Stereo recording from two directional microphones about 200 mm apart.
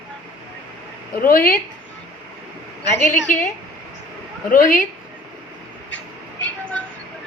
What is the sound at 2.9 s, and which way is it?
Speech, 10° left (ahead or behind).